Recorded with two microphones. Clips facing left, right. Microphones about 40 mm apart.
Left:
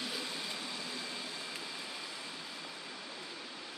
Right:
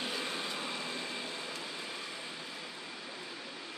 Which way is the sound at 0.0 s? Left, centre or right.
Right.